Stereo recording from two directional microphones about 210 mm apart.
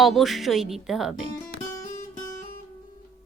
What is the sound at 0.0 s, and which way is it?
Speech, centre (ahead or behind).